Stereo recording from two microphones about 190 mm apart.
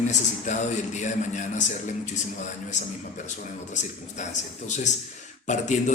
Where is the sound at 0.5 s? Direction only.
40° left (ahead or behind).